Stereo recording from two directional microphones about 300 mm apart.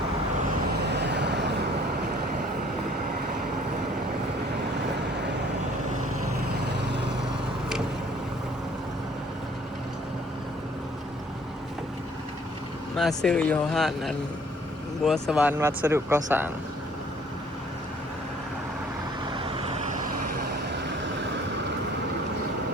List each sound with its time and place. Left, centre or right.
0.9 s vehicle: right
6.7 s vehicle: right
13.0 s speech: centre